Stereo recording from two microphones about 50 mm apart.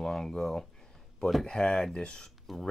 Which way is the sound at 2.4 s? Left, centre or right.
Centre.